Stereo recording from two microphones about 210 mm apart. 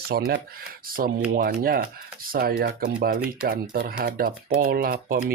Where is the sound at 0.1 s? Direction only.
45° right (ahead or behind).